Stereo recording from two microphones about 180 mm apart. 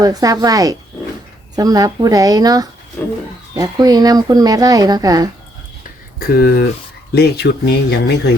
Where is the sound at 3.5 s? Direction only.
20° right (ahead or behind).